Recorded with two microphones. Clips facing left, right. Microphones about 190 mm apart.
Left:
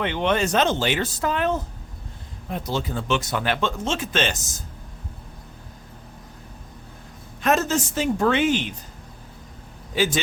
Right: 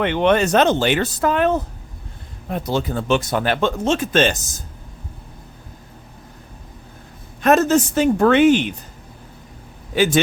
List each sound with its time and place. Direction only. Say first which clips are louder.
0.0 s speech: right 6 dB; 60° right (ahead or behind)
3.2 s speech: right 5 dB; 40° right (ahead or behind)
7.4 s speech: right 7 dB; 55° right (ahead or behind)
9.9 s speech: right 5 dB; 65° right (ahead or behind)